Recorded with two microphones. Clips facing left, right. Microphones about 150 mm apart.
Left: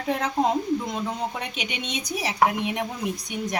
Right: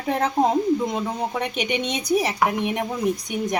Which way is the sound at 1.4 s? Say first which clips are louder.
Right 8 dB; 60° right (ahead or behind).